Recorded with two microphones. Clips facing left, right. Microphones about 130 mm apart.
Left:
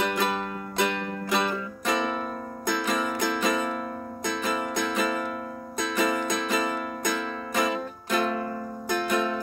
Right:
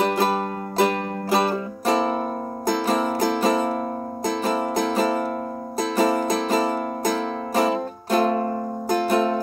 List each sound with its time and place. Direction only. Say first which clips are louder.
0.0 s music: right 6 dB; 35° right (ahead or behind)